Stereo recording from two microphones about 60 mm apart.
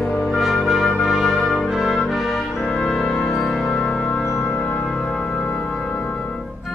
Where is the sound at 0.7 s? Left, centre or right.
Centre.